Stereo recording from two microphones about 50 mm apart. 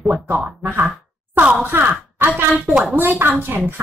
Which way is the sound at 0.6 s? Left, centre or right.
Right.